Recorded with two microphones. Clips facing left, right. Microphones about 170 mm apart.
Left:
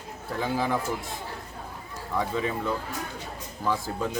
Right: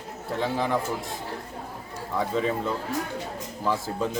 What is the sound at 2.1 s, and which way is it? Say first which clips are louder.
Speech: right 2 dB; centre (ahead or behind).